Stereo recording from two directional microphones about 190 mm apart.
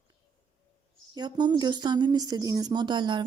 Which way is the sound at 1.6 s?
20° right (ahead or behind).